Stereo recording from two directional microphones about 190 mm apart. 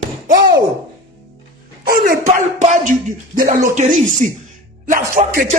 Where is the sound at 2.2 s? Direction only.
40° right (ahead or behind).